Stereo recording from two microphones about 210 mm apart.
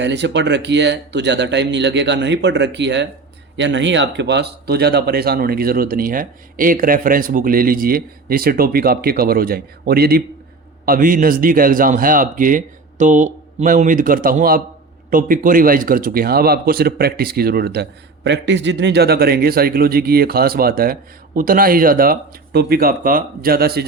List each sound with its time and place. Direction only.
0.0 s speech: 55° right (ahead or behind)